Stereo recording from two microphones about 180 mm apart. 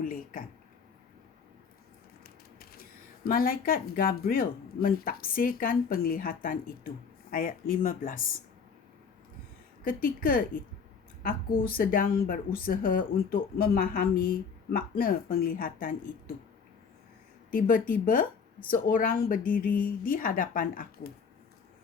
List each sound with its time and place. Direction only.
0.0 s a sound: 50° left (ahead or behind)
3.2 s speech: 55° left (ahead or behind)
9.8 s speech: 50° left (ahead or behind)
17.5 s speech: 50° left (ahead or behind)